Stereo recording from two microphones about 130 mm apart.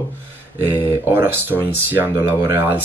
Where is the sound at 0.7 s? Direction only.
15° right (ahead or behind).